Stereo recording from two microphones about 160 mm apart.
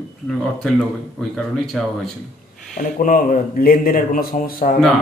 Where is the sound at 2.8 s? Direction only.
60° left (ahead or behind).